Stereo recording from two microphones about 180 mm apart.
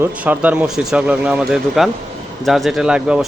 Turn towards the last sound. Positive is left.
turn(degrees=-5)  # may be behind; listen again after turning